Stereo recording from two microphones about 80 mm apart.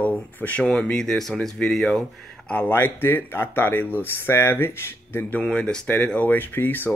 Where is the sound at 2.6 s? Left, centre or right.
Left.